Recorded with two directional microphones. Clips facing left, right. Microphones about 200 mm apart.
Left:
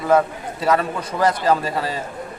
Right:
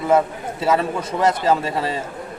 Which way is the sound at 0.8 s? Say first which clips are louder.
Right 1 dB; 25° right (ahead or behind).